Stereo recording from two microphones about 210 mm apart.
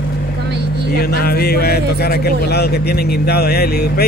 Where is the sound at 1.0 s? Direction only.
45° left (ahead or behind).